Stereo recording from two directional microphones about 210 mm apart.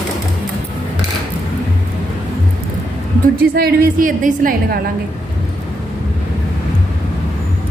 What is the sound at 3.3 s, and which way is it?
A woman's voice, 45° right (ahead or behind).